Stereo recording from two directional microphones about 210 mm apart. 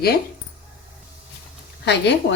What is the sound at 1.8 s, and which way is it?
Speech, 55° left (ahead or behind).